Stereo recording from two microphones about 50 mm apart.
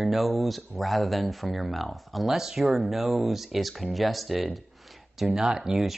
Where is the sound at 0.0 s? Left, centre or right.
Centre.